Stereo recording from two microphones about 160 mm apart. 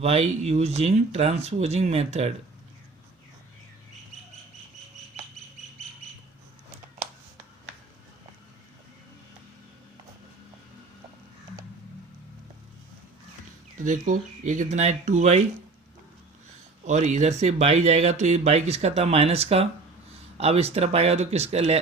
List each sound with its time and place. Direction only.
0.0 s speech: 40° right (ahead or behind)
13.7 s speech: 50° right (ahead or behind)
16.8 s speech: 50° right (ahead or behind)